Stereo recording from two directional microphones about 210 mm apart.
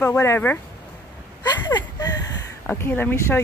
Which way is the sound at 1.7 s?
20° left (ahead or behind).